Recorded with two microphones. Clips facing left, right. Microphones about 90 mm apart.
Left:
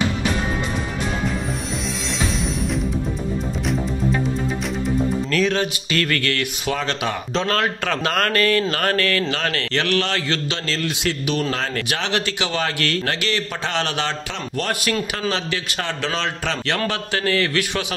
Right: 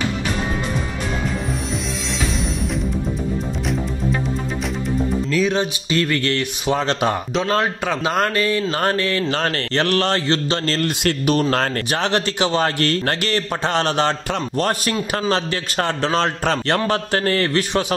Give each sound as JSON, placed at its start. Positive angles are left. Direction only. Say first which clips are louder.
{"t": 5.3, "sound": "speech", "louder": "right 2 dB", "side_deg": -15}
{"t": 7.5, "sound": "speech", "louder": "right 2 dB", "side_deg": -20}
{"t": 9.3, "sound": "a man's voice", "louder": "right 2 dB", "side_deg": -35}
{"t": 11.9, "sound": "a man's voice", "louder": "right 3 dB", "side_deg": -35}